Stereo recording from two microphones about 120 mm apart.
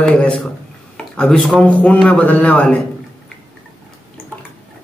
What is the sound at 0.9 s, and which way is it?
Speech, 5° left (ahead or behind).